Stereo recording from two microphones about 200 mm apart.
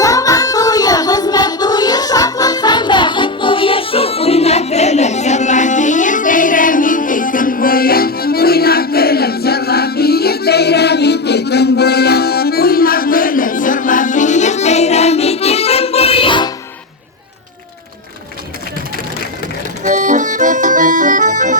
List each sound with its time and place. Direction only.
0.0 s child singing: 15° left (ahead or behind)
19.8 s accordion: 40° right (ahead or behind)